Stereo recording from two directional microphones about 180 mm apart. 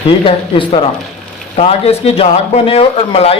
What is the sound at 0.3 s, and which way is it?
Speech, 30° left (ahead or behind).